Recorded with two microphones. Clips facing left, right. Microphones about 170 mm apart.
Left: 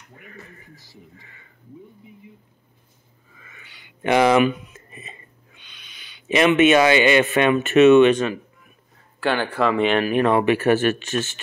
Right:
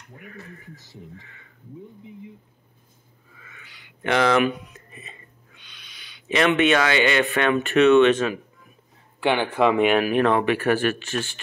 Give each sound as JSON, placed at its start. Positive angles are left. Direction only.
{"t": 0.1, "sound": "speech", "side_deg": 0}
{"t": 0.7, "sound": "speech", "side_deg": 15}
{"t": 4.0, "sound": "speech", "side_deg": 15}
{"t": 4.7, "sound": "a sound", "side_deg": 20}
{"t": 6.3, "sound": "speech", "side_deg": 10}
{"t": 8.0, "sound": "speech", "side_deg": -5}
{"t": 9.2, "sound": "speech", "side_deg": -20}
{"t": 9.8, "sound": "speech", "side_deg": -5}
{"t": 10.4, "sound": "speech", "side_deg": 20}